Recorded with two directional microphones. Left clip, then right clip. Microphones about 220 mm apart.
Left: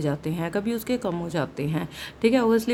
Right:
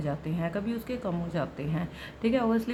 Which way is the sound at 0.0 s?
50° left (ahead or behind).